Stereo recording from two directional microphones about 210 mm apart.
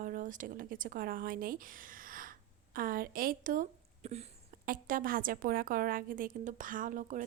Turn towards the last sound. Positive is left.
turn(degrees=-40)  # may be behind; listen again after turning